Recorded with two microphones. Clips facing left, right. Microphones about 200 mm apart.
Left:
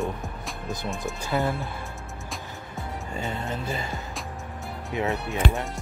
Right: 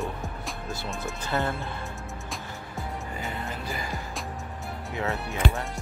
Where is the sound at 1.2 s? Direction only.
10° left (ahead or behind).